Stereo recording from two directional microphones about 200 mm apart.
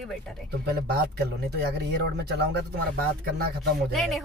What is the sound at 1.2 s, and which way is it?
Speech, 55° right (ahead or behind).